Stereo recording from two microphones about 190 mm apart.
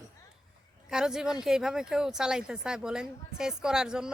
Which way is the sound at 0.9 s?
5° right (ahead or behind).